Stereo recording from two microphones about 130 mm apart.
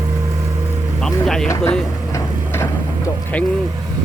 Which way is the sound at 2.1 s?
20° left (ahead or behind).